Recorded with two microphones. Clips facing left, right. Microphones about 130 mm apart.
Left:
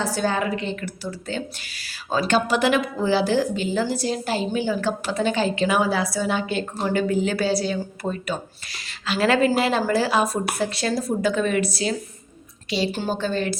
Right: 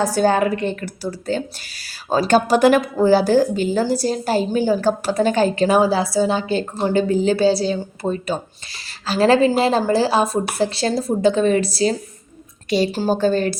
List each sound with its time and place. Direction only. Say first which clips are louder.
0.0 s a woman's voice: right 7 dB; 45° right (ahead or behind)